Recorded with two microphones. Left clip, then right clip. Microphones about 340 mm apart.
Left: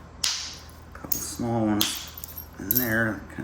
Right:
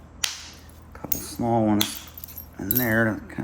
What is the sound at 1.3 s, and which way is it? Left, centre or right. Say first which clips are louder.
Speech: right 4 dB; centre.